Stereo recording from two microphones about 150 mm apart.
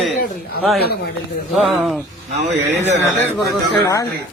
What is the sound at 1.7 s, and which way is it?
Speech, 5° right (ahead or behind).